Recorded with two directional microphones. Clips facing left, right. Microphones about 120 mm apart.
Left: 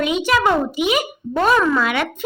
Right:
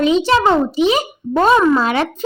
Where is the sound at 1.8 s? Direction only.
35° right (ahead or behind).